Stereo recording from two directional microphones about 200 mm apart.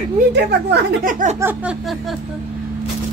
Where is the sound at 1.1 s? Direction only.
35° right (ahead or behind).